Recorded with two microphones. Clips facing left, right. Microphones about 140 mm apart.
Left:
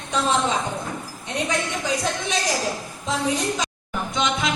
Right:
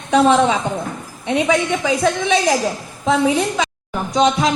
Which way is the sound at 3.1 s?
60° right (ahead or behind).